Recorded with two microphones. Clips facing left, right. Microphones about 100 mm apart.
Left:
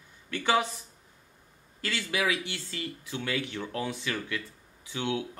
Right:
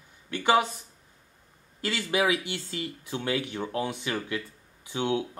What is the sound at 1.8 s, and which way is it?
Speech, 25° right (ahead or behind).